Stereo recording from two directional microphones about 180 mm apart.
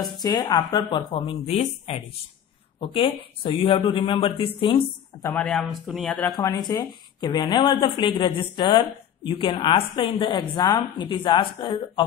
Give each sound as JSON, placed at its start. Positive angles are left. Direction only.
{"t": 0.2, "sound": "a woman's voice", "side_deg": 25}
{"t": 5.2, "sound": "speech", "side_deg": 5}
{"t": 6.3, "sound": "a woman's voice", "side_deg": 20}